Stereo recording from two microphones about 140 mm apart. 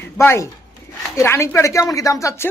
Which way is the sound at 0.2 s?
20° left (ahead or behind).